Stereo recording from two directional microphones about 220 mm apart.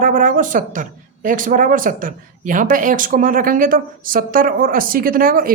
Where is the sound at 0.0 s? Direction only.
35° right (ahead or behind).